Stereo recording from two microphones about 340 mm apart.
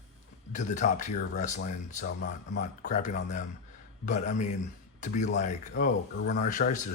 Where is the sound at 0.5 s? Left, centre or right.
Left.